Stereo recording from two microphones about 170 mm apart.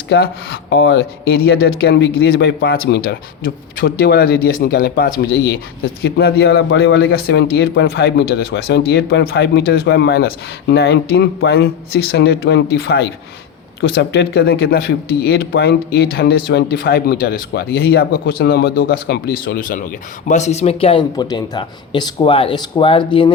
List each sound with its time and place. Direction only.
0.1 s a man's voice: 65° left (ahead or behind)
6.0 s a man's voice: 70° left (ahead or behind); by 23.3 s 30° left (ahead or behind)